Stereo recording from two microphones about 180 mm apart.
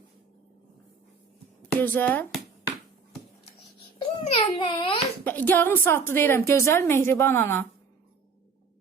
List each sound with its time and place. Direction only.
1.8 s a woman's voice: 10° left (ahead or behind)
3.9 s babbling: 30° left (ahead or behind)
5.2 s a woman's voice: 10° left (ahead or behind)